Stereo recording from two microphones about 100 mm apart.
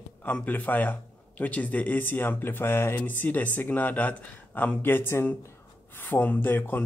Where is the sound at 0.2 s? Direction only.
20° left (ahead or behind).